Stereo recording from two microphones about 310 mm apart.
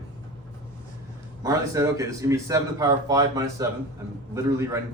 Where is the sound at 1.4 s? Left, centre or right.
Centre.